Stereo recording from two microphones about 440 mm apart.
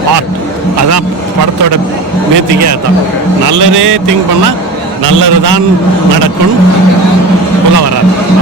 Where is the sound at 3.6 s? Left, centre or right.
Right.